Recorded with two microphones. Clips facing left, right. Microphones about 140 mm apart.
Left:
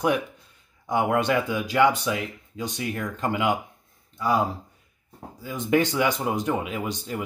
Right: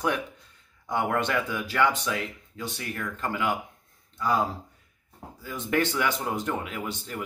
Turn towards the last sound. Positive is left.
turn(degrees=15)  # may be behind; listen again after turning